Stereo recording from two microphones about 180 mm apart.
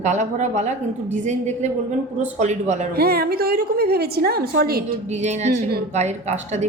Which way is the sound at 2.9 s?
60° right (ahead or behind).